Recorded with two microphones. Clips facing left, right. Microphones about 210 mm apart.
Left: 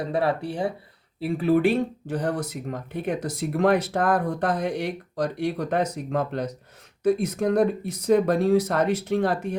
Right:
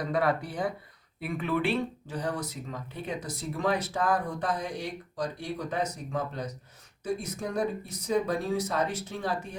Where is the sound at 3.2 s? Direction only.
75° left (ahead or behind).